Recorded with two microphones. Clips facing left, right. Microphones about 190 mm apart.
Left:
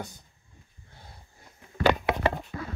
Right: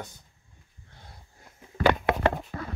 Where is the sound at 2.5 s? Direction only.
40° right (ahead or behind).